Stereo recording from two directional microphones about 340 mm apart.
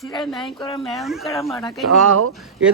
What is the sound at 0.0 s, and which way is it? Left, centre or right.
A man's voice, centre.